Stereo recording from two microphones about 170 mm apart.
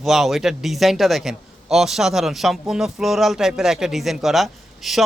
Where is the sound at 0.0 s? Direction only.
Centre (ahead or behind).